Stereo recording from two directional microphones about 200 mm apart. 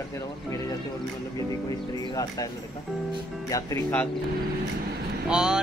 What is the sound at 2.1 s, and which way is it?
Speech, 15° left (ahead or behind).